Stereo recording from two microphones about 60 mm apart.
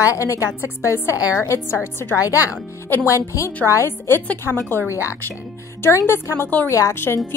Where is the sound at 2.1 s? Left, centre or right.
Left.